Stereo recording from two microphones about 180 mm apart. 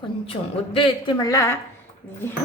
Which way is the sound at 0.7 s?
25° left (ahead or behind).